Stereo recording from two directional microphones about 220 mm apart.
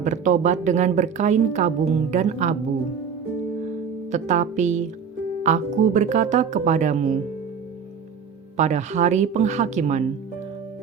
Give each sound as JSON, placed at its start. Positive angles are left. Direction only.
{"t": 0.0, "sound": "a woman's voice", "side_deg": -35}
{"t": 4.1, "sound": "a woman's voice", "side_deg": -35}
{"t": 8.5, "sound": "a woman's voice", "side_deg": -30}